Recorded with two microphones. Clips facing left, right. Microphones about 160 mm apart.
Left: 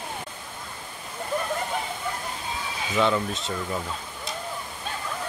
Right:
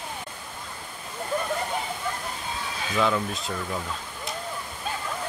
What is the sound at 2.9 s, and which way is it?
Speech, centre (ahead or behind).